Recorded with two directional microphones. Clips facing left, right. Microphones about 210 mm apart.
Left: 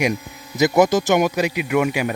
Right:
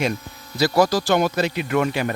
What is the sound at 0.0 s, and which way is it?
Speech, 15° left (ahead or behind).